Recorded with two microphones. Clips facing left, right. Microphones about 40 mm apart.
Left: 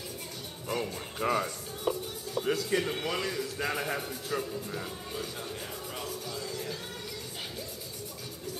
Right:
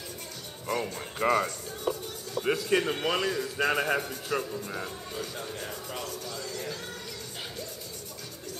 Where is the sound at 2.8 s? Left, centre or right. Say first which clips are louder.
Right 4 dB; centre.